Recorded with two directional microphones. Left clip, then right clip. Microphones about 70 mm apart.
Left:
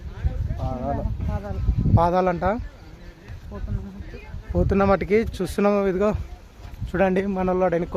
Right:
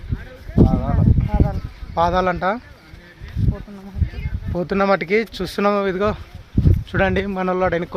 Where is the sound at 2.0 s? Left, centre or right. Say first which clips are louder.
Right 3 dB; centre.